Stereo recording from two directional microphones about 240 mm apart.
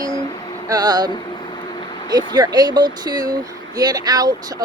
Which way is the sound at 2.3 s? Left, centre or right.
Centre.